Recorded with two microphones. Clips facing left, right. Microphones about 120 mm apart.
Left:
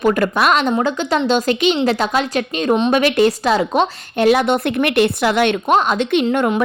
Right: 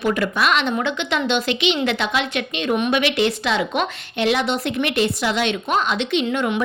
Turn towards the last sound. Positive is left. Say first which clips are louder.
# left 5 dB
turn(degrees=45)  # may be behind; listen again after turning